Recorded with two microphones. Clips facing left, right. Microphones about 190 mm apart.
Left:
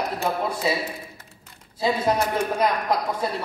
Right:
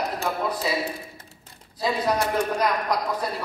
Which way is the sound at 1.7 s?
25° left (ahead or behind).